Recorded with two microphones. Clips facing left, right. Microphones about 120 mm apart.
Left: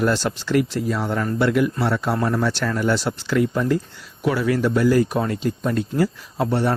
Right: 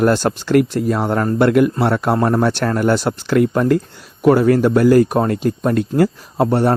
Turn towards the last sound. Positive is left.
turn(degrees=-50)  # may be behind; listen again after turning